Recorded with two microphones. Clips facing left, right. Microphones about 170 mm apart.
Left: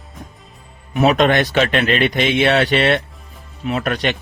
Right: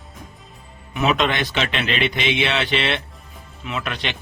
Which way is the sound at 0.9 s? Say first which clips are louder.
Left 6 dB; 45° left (ahead or behind).